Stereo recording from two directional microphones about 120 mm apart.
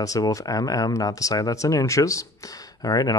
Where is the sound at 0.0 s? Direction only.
30° left (ahead or behind).